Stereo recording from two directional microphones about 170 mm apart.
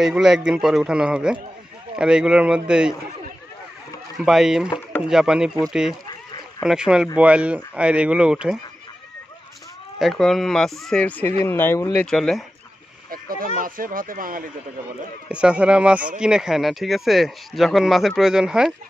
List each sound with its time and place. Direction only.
0.0 s speech: 5° right (ahead or behind)
4.2 s speech: centre (ahead or behind)
9.9 s speech: centre (ahead or behind)
13.4 s speech: 55° right (ahead or behind)
15.2 s speech: 5° right (ahead or behind)